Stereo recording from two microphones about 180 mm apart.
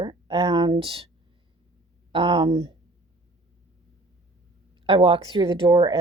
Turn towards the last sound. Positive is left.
turn(degrees=-25)  # may be behind; listen again after turning